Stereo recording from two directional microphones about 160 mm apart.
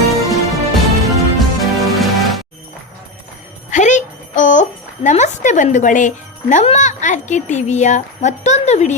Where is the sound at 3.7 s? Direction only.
50° left (ahead or behind).